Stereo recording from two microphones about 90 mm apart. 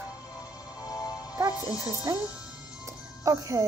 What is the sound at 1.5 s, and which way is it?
Speech, 45° left (ahead or behind).